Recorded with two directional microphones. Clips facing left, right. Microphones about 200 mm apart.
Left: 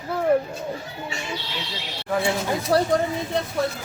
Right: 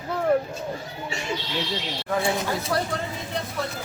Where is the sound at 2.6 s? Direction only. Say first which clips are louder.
Left 7 dB; 35° left (ahead or behind).